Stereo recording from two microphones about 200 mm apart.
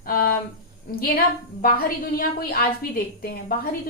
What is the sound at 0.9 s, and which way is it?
A woman's voice, 45° left (ahead or behind).